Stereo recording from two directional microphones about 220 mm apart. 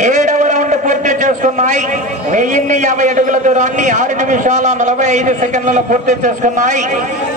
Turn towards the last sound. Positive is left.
turn(degrees=-35)  # may be behind; listen again after turning